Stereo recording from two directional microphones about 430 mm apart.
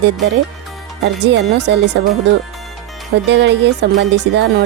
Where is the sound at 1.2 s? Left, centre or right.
Right.